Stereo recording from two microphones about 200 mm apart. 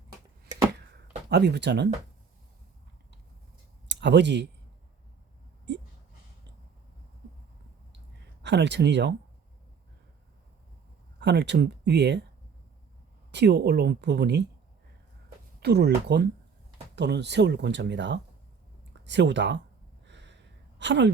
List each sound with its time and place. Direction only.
1.3 s speech: 55° right (ahead or behind)
3.8 s speech: 60° right (ahead or behind)
8.4 s speech: 60° right (ahead or behind)
11.2 s speech: 60° right (ahead or behind)
13.3 s speech: 55° right (ahead or behind)
15.6 s speech: 55° right (ahead or behind)
20.1 s a sound: 60° right (ahead or behind)